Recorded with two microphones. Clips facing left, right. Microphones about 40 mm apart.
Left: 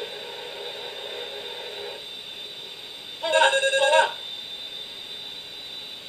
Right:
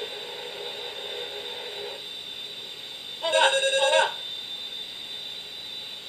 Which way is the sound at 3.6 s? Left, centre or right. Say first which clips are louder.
Left 2 dB; centre.